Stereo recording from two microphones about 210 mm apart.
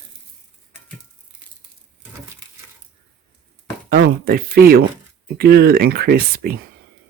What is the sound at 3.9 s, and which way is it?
Speech, 45° right (ahead or behind).